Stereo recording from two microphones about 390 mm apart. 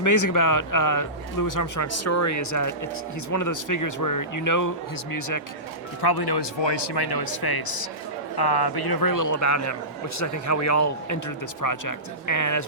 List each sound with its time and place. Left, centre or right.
0.0 s speech: left
6.0 s speech: left